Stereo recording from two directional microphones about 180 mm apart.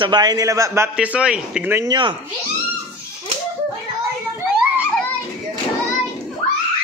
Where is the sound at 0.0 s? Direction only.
25° right (ahead or behind).